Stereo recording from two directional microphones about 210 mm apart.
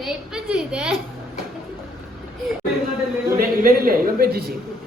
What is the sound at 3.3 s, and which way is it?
A man's voice, 45° right (ahead or behind).